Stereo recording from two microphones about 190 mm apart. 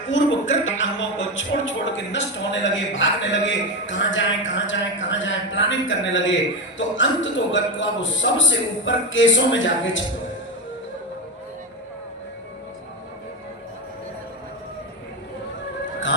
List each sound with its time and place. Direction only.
0.1 s speech: 80° left